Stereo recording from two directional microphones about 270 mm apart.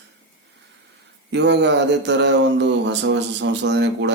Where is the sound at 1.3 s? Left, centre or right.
Right.